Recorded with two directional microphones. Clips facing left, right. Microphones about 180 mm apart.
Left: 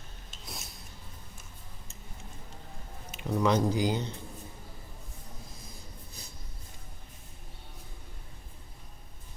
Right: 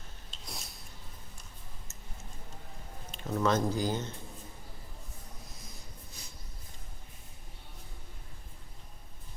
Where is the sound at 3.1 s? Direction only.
15° left (ahead or behind).